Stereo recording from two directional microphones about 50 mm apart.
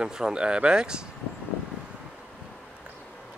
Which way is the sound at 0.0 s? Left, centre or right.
Centre.